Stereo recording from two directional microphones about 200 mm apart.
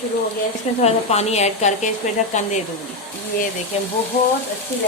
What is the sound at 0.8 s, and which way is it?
Speech, 30° left (ahead or behind).